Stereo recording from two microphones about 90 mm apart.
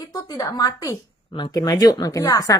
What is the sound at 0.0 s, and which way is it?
A woman's voice, 45° left (ahead or behind).